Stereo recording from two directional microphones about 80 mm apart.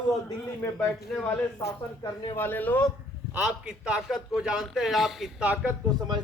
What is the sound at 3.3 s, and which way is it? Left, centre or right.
A man's voice, centre.